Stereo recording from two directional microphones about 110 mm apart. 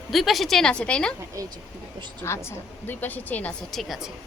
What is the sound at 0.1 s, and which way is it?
Speech, centre (ahead or behind).